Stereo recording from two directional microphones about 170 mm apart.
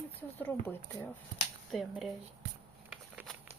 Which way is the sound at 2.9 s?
5° right (ahead or behind).